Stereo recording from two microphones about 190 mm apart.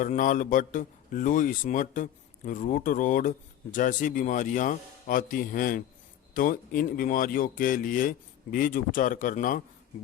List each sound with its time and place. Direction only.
0.0 s a man's voice: 45° left (ahead or behind)